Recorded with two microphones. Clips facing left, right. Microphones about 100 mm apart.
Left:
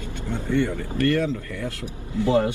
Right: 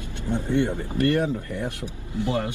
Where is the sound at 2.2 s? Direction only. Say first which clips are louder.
Left 6 dB; 25° left (ahead or behind).